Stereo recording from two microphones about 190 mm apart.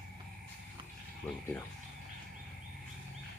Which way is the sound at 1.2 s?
10° left (ahead or behind).